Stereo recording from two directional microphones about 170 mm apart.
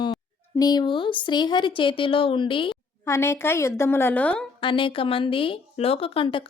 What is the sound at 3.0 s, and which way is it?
A woman's voice, 15° left (ahead or behind).